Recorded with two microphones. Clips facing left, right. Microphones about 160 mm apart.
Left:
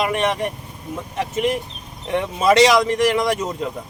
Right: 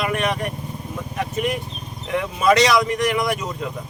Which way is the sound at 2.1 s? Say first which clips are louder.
Left 1 dB; 30° left (ahead or behind).